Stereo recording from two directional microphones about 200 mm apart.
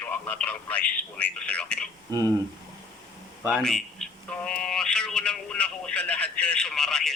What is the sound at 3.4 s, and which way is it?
Speech, centre (ahead or behind).